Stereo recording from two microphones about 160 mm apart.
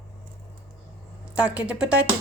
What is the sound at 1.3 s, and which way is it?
Speech, 5° right (ahead or behind).